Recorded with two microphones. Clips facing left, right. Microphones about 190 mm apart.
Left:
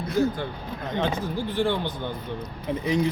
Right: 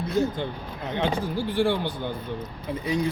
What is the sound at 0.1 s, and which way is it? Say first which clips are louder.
A man's voice: left 2 dB; 25° right (ahead or behind).